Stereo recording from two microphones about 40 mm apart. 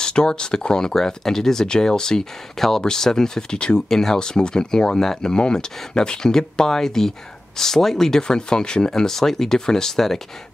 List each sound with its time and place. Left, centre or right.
0.0 s speech: centre
3.9 s speech: centre